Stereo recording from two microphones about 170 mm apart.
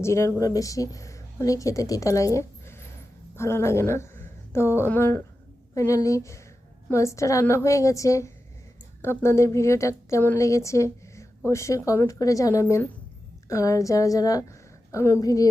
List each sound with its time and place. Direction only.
0.0 s a woman's voice: 15° left (ahead or behind)